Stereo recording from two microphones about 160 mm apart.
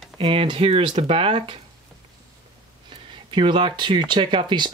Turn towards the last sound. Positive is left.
turn(degrees=-30)  # may be behind; listen again after turning